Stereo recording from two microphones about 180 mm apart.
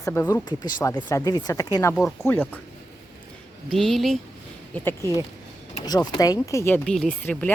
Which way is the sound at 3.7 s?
Centre (ahead or behind).